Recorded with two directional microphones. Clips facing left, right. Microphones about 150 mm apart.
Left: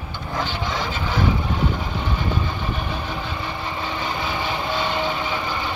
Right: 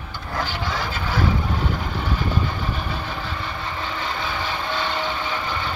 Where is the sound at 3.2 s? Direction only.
15° left (ahead or behind).